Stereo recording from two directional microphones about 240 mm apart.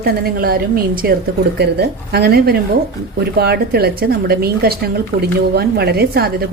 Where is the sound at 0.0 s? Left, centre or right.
Right.